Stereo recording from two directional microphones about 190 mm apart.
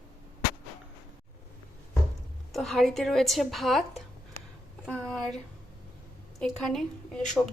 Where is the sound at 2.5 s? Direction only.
Centre (ahead or behind).